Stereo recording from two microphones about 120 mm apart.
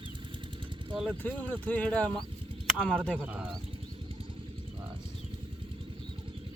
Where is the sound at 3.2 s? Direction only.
10° right (ahead or behind).